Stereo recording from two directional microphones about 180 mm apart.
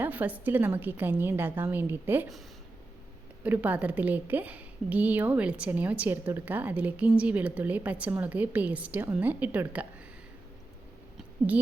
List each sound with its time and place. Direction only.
0.0 s a woman's voice: 10° right (ahead or behind)
3.4 s a woman's voice: 10° right (ahead or behind)